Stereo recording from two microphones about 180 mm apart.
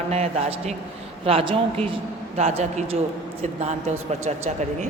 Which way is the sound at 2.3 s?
40° right (ahead or behind).